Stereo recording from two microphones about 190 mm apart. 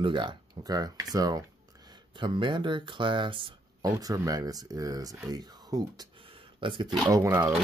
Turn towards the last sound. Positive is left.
turn(degrees=-15)  # may be behind; listen again after turning